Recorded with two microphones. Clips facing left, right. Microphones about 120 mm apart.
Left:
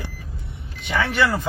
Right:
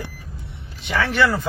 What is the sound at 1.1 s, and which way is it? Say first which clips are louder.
Speech: right 2 dB; 15° left (ahead or behind).